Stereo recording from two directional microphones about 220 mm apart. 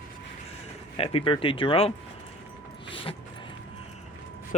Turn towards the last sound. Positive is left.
turn(degrees=25)  # may be behind; listen again after turning